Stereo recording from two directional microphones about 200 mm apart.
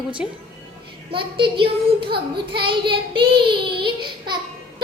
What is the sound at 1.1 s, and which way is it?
A woman's voice, 25° right (ahead or behind).